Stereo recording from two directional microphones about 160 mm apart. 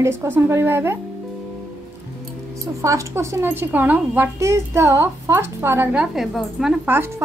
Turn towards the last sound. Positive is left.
turn(degrees=-10)  # may be behind; listen again after turning